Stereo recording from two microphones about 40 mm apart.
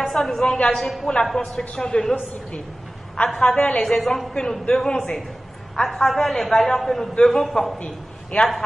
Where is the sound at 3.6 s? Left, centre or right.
Left.